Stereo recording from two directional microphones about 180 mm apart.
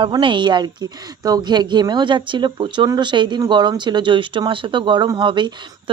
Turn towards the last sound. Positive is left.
turn(degrees=-25)  # may be behind; listen again after turning